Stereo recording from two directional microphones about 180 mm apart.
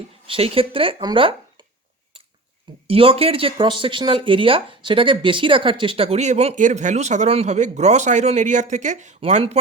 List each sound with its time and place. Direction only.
0.3 s speech: 30° right (ahead or behind)
2.8 s speech: 30° right (ahead or behind)